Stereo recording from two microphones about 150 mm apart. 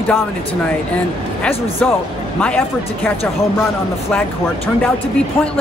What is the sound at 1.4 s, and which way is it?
Speech, 15° left (ahead or behind).